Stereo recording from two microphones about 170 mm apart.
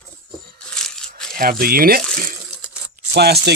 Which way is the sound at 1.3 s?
60° right (ahead or behind).